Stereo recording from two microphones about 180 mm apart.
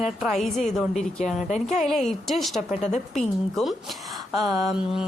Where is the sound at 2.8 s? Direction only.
40° left (ahead or behind).